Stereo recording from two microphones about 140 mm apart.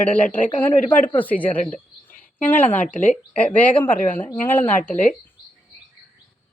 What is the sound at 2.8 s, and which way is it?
Speech, 65° left (ahead or behind).